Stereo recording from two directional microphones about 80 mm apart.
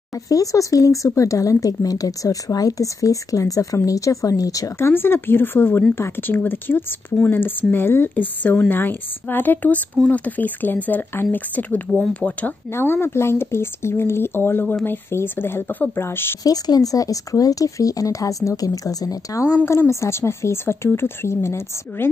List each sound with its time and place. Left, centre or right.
0.1 s speech: left
4.7 s a woman's voice: left
12.7 s a woman's voice: left
16.4 s speech: left
19.9 s speech: left